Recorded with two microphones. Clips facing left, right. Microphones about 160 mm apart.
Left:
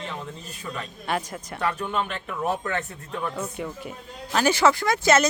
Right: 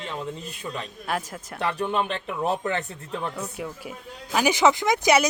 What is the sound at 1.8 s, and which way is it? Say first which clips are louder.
Speech: right 2 dB; 20° right (ahead or behind).